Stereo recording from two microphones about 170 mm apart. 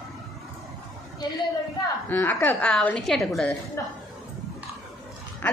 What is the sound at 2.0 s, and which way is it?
A man's voice, 10° left (ahead or behind).